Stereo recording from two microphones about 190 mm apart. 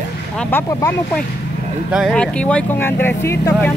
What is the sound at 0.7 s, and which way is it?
Speech, 15° left (ahead or behind).